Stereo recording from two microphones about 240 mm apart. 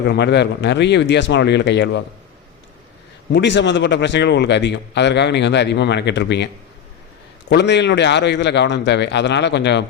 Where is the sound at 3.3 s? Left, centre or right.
Left.